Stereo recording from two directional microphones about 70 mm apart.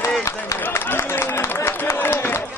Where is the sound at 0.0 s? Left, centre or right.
Left.